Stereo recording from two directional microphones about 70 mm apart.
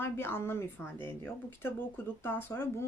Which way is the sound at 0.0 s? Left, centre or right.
Left.